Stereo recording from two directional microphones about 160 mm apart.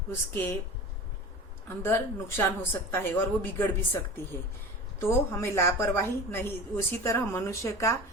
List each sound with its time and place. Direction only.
0.1 s a woman's voice: 15° left (ahead or behind)
1.6 s a woman's voice: 15° left (ahead or behind)
4.9 s a woman's voice: 15° left (ahead or behind)